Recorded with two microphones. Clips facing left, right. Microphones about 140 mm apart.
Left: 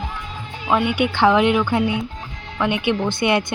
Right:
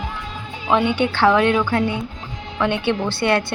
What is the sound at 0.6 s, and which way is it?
Speech, 5° left (ahead or behind).